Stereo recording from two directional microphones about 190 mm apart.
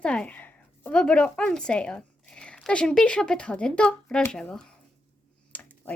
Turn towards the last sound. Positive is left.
turn(degrees=10)  # may be behind; listen again after turning